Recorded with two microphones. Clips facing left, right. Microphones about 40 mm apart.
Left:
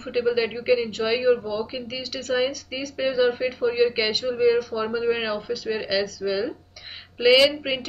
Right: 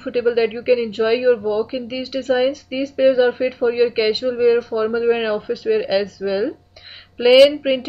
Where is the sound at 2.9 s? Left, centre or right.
Centre.